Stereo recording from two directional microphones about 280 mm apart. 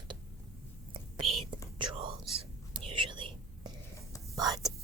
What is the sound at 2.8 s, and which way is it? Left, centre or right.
Whispering, centre.